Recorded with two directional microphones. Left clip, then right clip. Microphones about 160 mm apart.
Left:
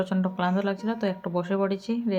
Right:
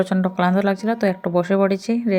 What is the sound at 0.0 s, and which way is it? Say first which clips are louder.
Speech: right 7 dB; 35° right (ahead or behind).